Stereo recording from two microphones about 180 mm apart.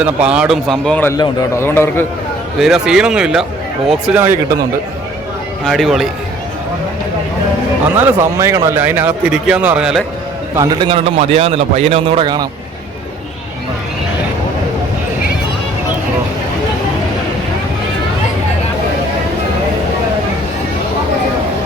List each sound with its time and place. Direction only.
0.0 s a man's voice: 5° right (ahead or behind)
1.1 s a man's voice: 20° left (ahead or behind)
2.6 s a man's voice: centre (ahead or behind)
5.6 s a man's voice: centre (ahead or behind)
7.9 s speech: 10° right (ahead or behind)
10.5 s a man's voice: 20° right (ahead or behind)